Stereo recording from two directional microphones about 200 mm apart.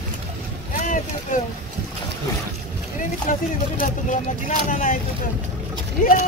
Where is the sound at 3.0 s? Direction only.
40° left (ahead or behind).